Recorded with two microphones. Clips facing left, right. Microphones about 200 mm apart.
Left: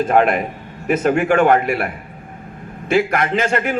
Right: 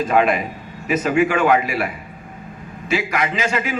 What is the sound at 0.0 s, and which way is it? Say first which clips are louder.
A man's voice: left 2 dB; 55° left (ahead or behind).